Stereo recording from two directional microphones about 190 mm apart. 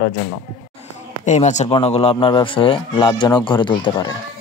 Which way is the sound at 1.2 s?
40° left (ahead or behind).